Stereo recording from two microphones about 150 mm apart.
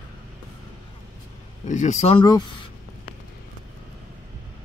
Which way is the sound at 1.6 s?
55° left (ahead or behind).